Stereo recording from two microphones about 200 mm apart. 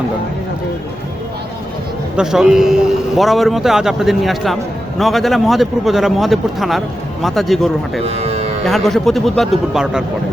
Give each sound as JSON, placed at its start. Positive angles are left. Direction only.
{"t": 2.1, "sound": "a man's voice", "side_deg": -5}
{"t": 8.0, "sound": "music", "side_deg": -30}
{"t": 8.6, "sound": "a man's voice", "side_deg": 0}